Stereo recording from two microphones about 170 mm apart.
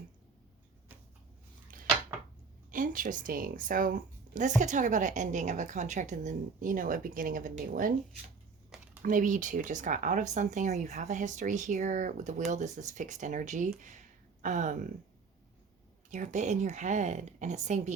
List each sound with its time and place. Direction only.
1.7 s a sound: 55° right (ahead or behind)
2.7 s speech: 55° right (ahead or behind)
9.0 s speech: 50° right (ahead or behind)
16.0 s speech: 45° right (ahead or behind)